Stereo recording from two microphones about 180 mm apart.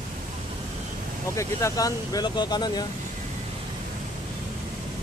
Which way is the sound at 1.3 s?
20° left (ahead or behind).